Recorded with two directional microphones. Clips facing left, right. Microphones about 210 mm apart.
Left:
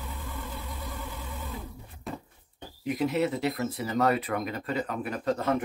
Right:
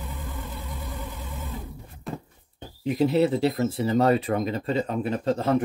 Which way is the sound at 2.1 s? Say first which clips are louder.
Right 3 dB; centre (ahead or behind).